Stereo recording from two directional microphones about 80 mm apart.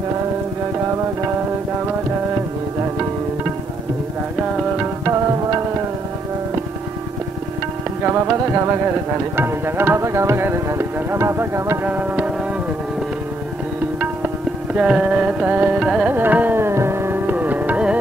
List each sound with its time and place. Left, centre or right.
8.0 s music: centre
8.8 s speech: right
11.8 s music: centre
13.9 s music: centre
15.8 s classical music: centre
16.1 s carnatic music: right